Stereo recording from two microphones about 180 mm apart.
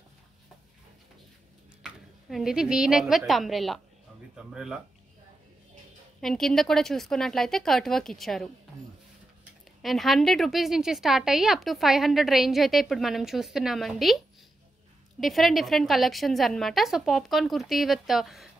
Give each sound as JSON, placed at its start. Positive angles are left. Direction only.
{"t": 1.8, "sound": "a woman's voice", "side_deg": 0}
{"t": 6.2, "sound": "a woman's voice", "side_deg": 0}
{"t": 9.8, "sound": "a woman's voice", "side_deg": 0}